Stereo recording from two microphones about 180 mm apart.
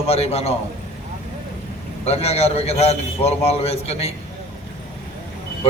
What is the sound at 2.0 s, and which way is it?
A man's voice, 35° left (ahead or behind).